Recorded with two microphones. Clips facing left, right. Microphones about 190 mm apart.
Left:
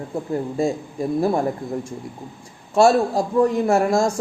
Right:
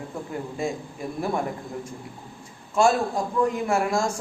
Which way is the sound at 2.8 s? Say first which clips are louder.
Left 5 dB; 35° left (ahead or behind).